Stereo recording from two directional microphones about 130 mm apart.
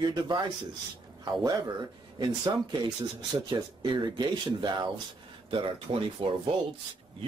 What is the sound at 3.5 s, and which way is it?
A man's voice, 35° right (ahead or behind).